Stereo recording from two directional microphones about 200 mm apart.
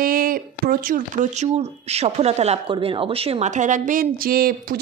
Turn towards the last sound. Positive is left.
turn(degrees=-50)  # may be behind; listen again after turning